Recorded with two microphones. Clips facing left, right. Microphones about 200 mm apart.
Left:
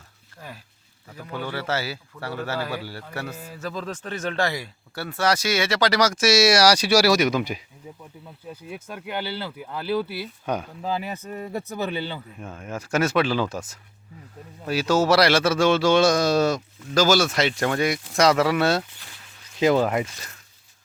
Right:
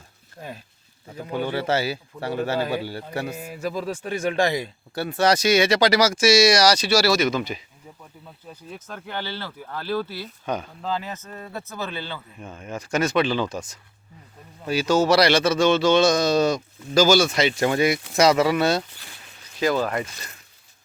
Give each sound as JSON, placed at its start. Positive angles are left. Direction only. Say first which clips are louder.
{"t": 0.3, "sound": "a man's voice", "louder": "right 4 dB", "side_deg": -20}
{"t": 8.6, "sound": "speech", "louder": "left 1 dB", "side_deg": 10}
{"t": 12.4, "sound": "speech", "louder": "even", "side_deg": 5}
{"t": 14.7, "sound": "speech", "louder": "right 1 dB", "side_deg": 5}
{"t": 19.5, "sound": "speech", "louder": "left 3 dB", "side_deg": 20}